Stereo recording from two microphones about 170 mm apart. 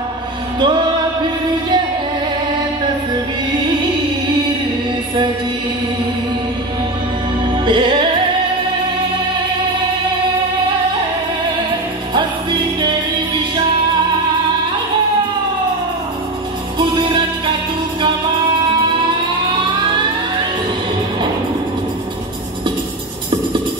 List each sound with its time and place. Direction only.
7.6 s music: 30° right (ahead or behind)
16.7 s music: 25° right (ahead or behind)
18.7 s music: 30° right (ahead or behind)